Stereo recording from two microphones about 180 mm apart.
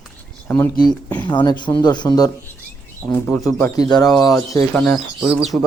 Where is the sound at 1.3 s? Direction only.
25° left (ahead or behind).